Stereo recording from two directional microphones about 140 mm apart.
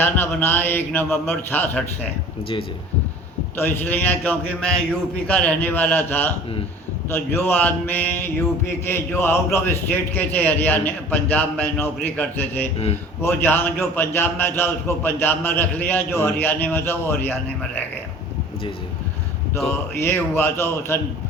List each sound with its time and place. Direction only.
0.0 s a man's voice: 15° left (ahead or behind)
3.6 s a man's voice: 15° left (ahead or behind)
19.6 s a man's voice: 15° left (ahead or behind)